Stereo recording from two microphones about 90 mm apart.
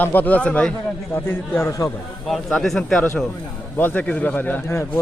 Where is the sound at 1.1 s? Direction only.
25° left (ahead or behind).